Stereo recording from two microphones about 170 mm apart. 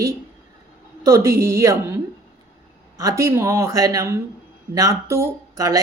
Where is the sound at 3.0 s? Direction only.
20° right (ahead or behind).